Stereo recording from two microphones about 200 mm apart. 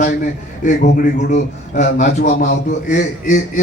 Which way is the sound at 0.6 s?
45° left (ahead or behind).